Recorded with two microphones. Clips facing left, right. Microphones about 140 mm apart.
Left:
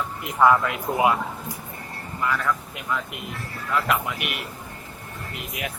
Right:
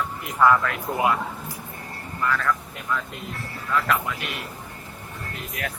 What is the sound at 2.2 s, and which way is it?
Speech, 15° left (ahead or behind).